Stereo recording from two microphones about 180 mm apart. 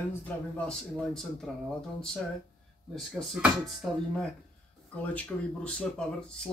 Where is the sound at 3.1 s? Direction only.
Centre (ahead or behind).